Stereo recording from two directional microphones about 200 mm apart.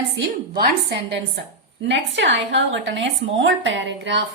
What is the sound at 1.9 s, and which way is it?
A woman's voice, 65° right (ahead or behind).